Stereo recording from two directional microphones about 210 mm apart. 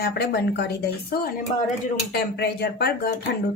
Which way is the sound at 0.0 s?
50° left (ahead or behind).